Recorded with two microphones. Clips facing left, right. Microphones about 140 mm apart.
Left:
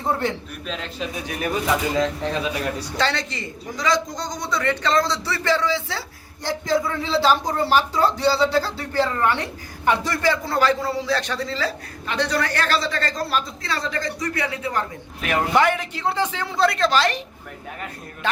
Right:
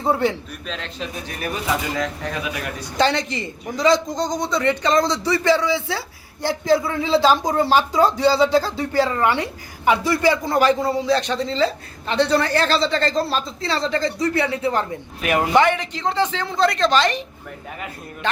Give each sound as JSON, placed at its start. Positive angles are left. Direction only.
{"t": 0.0, "sound": "a man's voice", "side_deg": -10}
{"t": 0.7, "sound": "a man's voice", "side_deg": 5}
{"t": 2.0, "sound": "speech", "side_deg": 25}
{"t": 3.0, "sound": "speech", "side_deg": -20}
{"t": 15.2, "sound": "a man's voice", "side_deg": 0}